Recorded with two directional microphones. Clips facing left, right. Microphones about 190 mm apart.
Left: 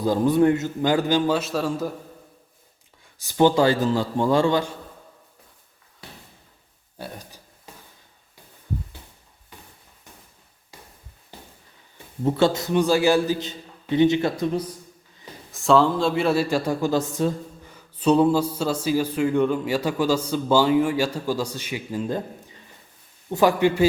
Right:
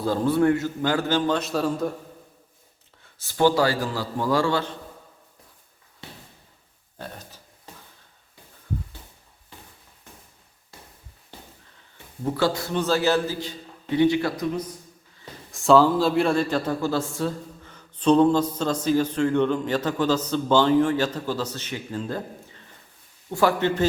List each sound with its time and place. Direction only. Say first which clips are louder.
0.0 s speech: left 2 dB; 15° left (ahead or behind)
1.4 s a man's voice: even; centre (ahead or behind)
3.2 s a man's voice: left 2 dB; 15° left (ahead or behind)
7.0 s a sound: left 2 dB; 15° left (ahead or behind)
12.2 s a man's voice: left 4 dB; 20° left (ahead or behind)
15.5 s speech: right 1 dB; centre (ahead or behind)